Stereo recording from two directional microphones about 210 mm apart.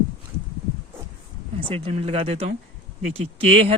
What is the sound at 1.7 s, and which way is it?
Speech, 25° right (ahead or behind).